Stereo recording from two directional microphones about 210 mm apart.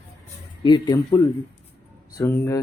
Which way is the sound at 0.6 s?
20° left (ahead or behind).